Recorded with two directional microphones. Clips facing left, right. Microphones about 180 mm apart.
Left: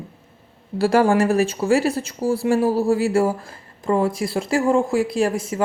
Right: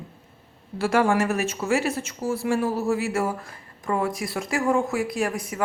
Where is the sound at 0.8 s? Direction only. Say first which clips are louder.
Left 5 dB; 35° left (ahead or behind).